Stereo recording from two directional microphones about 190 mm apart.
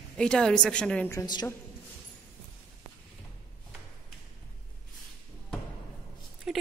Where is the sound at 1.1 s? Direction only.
20° left (ahead or behind).